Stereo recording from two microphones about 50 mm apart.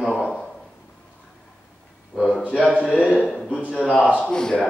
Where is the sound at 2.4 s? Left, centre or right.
Left.